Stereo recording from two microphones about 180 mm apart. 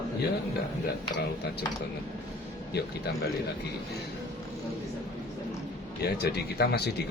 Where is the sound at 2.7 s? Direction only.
65° left (ahead or behind).